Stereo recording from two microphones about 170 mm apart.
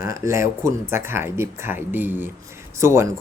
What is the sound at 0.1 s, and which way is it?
Speech, 15° right (ahead or behind).